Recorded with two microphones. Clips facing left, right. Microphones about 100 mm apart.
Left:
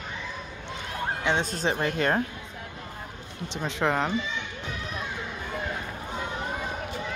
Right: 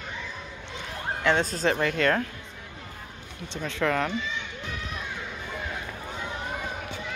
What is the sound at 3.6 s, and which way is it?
Speech, 25° left (ahead or behind).